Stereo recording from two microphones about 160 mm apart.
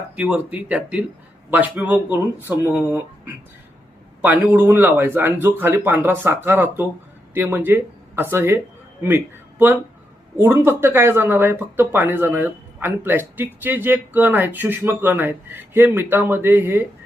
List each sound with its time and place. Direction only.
0.2 s speech: 5° right (ahead or behind)